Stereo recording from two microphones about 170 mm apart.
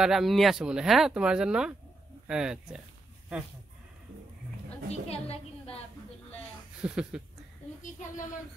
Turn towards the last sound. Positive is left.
turn(degrees=-5)  # may be behind; listen again after turning